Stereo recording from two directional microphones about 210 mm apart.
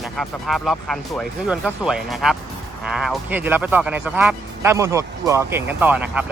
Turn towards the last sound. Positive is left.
turn(degrees=-10)  # may be behind; listen again after turning